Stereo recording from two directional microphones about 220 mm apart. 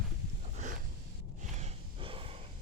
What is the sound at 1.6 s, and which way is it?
Gasp, 25° right (ahead or behind).